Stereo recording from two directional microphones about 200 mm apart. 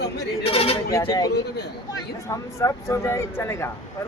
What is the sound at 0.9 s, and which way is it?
Speech, 15° left (ahead or behind).